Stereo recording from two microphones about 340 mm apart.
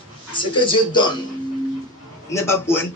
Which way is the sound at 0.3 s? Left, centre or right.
Centre.